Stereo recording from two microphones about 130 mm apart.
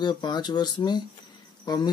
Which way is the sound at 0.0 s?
35° left (ahead or behind).